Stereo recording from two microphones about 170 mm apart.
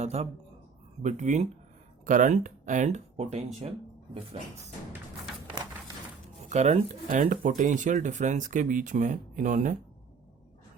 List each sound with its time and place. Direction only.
0.0 s speech: 40° right (ahead or behind)
6.4 s speech: 40° right (ahead or behind)